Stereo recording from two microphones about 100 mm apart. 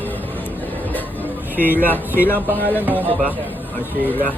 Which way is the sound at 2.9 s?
15° right (ahead or behind).